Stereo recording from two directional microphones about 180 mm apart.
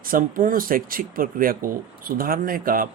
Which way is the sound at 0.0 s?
50° right (ahead or behind).